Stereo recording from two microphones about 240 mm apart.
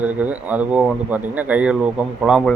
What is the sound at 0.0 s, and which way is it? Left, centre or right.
Speech, centre.